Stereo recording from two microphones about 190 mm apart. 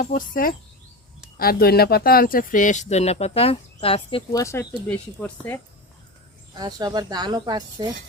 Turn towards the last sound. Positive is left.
turn(degrees=-25)  # may be behind; listen again after turning